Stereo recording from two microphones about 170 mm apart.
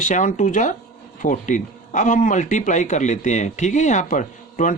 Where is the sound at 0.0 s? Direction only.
50° left (ahead or behind).